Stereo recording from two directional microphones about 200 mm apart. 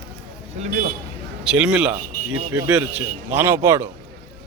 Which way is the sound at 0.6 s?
40° right (ahead or behind).